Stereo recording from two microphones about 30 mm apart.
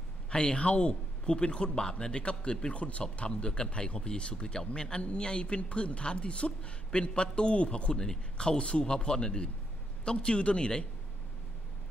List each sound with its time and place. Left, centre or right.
0.3 s a man's voice: left
2.7 s speech: left
3.3 s speech: left
10.1 s speech: left